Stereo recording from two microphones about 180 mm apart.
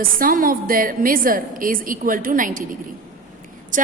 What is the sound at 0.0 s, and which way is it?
A woman's voice, 50° right (ahead or behind).